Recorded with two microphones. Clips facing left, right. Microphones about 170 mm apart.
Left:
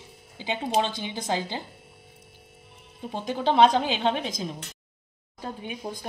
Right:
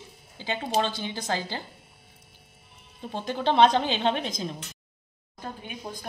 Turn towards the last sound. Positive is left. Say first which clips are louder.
# left 3 dB
turn(degrees=40)  # may be behind; listen again after turning